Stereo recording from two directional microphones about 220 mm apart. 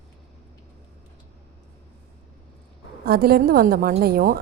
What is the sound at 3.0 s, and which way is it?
A woman's voice, 45° right (ahead or behind).